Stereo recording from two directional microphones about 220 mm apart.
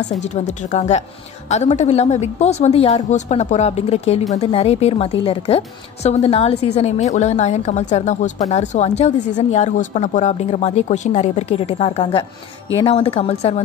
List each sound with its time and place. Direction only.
0.2 s a woman's voice: 30° left (ahead or behind)